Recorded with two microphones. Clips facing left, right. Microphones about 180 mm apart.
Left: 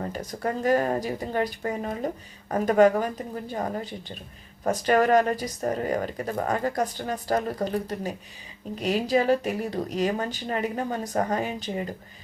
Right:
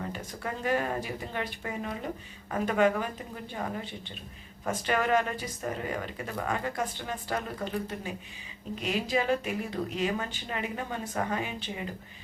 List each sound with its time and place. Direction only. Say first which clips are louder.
0.0 s speech: left 6 dB; 40° left (ahead or behind)